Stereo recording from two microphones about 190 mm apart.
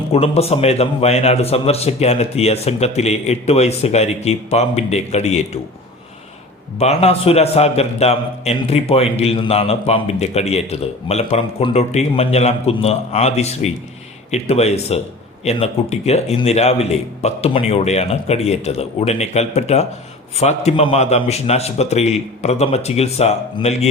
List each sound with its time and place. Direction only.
0.1 s a man's voice: 30° left (ahead or behind)
6.7 s a man's voice: 35° left (ahead or behind)